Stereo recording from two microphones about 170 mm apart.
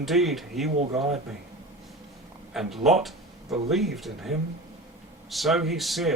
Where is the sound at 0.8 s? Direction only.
40° right (ahead or behind).